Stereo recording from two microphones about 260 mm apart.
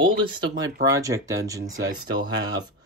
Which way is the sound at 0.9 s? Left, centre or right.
Centre.